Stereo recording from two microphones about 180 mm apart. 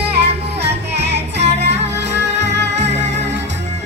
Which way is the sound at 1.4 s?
35° right (ahead or behind).